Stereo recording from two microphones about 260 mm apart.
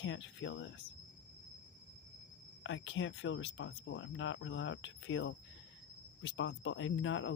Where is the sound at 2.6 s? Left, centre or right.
Left.